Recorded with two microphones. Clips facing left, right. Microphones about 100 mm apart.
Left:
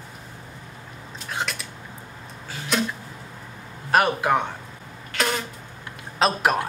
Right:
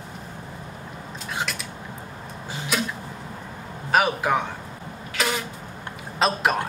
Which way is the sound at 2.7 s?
5° right (ahead or behind).